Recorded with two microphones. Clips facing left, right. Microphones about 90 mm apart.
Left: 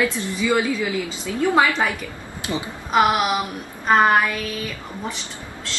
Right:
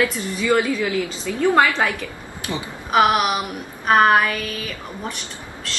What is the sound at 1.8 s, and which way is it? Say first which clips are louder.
A woman's voice: right 1 dB; 20° left (ahead or behind).